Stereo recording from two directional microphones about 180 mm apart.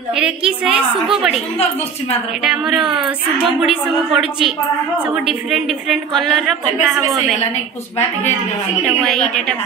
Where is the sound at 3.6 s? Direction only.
Centre (ahead or behind).